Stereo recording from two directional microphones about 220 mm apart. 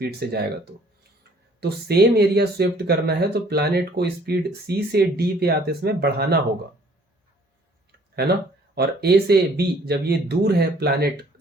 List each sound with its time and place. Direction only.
0.0 s speech: 45° right (ahead or behind)
8.7 s speech: 45° right (ahead or behind)